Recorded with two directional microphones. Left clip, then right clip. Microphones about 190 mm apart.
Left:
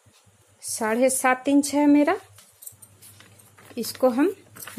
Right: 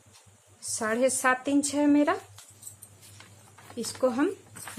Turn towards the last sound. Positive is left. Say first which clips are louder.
# left 5 dB
turn(degrees=35)  # may be behind; listen again after turning